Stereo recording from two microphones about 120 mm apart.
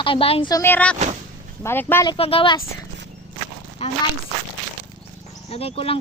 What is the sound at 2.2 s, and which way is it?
Speech, 50° left (ahead or behind).